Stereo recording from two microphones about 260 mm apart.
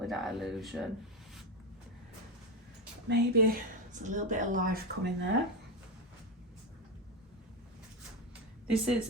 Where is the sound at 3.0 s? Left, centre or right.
Right.